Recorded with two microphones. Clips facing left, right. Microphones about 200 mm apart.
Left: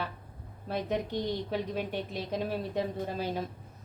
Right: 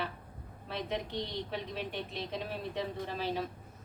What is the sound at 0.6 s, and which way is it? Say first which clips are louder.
A woman's voice: left 5 dB; 45° left (ahead or behind).